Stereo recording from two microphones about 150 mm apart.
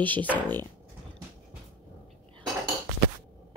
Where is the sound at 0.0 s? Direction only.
10° left (ahead or behind).